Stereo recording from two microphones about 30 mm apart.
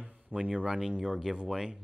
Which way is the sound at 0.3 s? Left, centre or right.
Right.